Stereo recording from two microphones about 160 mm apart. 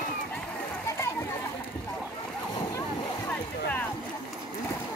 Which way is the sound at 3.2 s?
10° left (ahead or behind).